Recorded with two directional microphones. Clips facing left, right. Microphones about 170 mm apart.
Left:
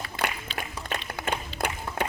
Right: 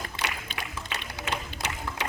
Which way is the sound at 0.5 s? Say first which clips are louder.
Left 3 dB; 50° left (ahead or behind).